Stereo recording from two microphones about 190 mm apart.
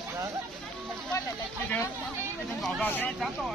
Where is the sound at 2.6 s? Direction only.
5° left (ahead or behind).